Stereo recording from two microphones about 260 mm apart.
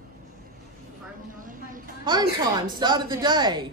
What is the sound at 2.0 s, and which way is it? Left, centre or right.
A woman's voice, centre.